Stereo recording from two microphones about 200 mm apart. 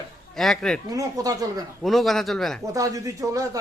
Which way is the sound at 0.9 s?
15° right (ahead or behind).